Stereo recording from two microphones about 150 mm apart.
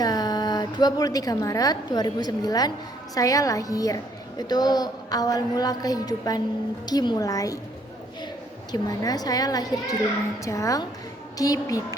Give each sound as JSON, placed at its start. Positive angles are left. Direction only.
{"t": 0.0, "sound": "a woman's voice", "side_deg": 25}
{"t": 8.7, "sound": "a woman's voice", "side_deg": 25}